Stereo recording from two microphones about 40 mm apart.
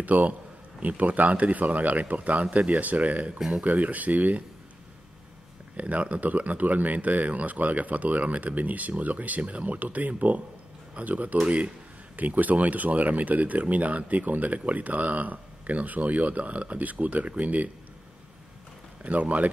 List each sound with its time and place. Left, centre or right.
0.0 s speech: right
5.8 s speech: right
19.0 s speech: right